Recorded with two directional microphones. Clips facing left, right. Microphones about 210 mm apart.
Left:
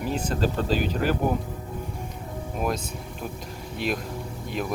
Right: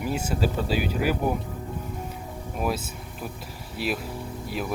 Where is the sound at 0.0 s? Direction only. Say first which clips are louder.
Left 1 dB; 10° right (ahead or behind).